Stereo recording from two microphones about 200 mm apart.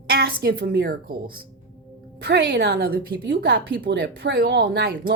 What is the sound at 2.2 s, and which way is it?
A woman's voice, 60° right (ahead or behind).